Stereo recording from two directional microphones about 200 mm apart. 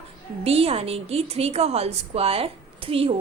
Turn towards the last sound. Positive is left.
turn(degrees=-25)  # may be behind; listen again after turning